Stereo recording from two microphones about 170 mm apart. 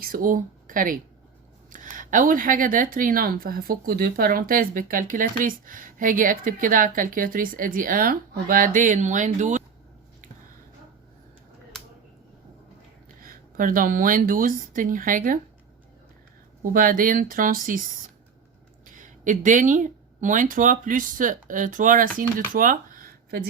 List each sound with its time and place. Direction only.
0.0 s speech: 55° right (ahead or behind)
13.2 s speech: 55° right (ahead or behind)
16.7 s speech: 55° right (ahead or behind)
18.9 s speech: 50° right (ahead or behind)